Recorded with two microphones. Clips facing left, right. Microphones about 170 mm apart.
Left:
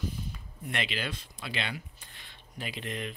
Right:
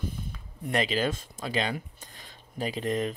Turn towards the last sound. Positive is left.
turn(degrees=-40)  # may be behind; listen again after turning